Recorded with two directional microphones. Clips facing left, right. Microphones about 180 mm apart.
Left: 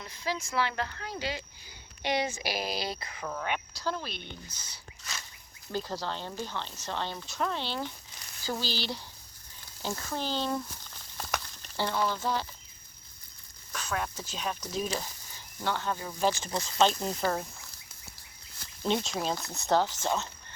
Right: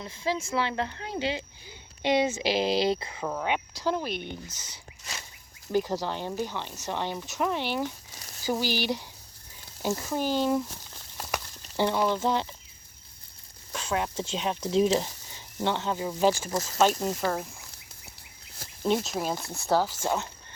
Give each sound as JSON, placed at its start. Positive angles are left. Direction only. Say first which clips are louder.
{"t": 0.0, "sound": "speech", "louder": "right 5 dB", "side_deg": -25}
{"t": 11.3, "sound": "a sound", "louder": "right 2 dB", "side_deg": -10}
{"t": 13.7, "sound": "speech", "louder": "right 5 dB", "side_deg": -25}
{"t": 18.9, "sound": "speech", "louder": "right 3 dB", "side_deg": -5}